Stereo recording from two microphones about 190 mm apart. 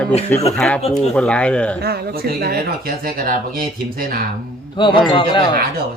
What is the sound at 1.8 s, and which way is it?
Speech, 55° right (ahead or behind).